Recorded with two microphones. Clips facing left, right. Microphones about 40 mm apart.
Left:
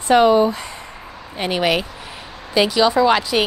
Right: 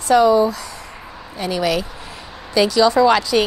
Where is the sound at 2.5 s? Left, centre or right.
Centre.